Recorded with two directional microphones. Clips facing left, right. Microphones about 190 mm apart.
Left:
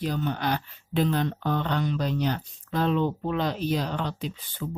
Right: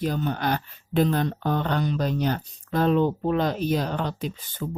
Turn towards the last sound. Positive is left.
turn(degrees=-45)  # may be behind; listen again after turning